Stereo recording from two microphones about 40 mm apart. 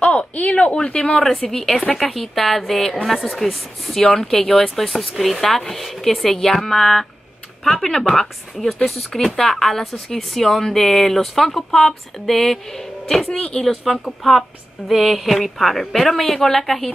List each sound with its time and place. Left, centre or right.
0.1 s a sound: left
0.7 s speech: left
1.5 s speech: centre
13.4 s speech: left
13.7 s speech: centre